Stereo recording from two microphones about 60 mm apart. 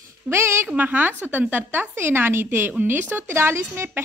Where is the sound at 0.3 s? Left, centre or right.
Right.